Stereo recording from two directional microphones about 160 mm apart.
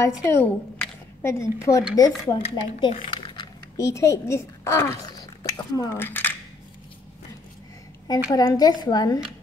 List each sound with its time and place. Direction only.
0.2 s a woman's voice: 15° left (ahead or behind)
2.9 s speech: 35° left (ahead or behind)
3.7 s speech: 20° left (ahead or behind)
8.1 s a woman's voice: 25° left (ahead or behind)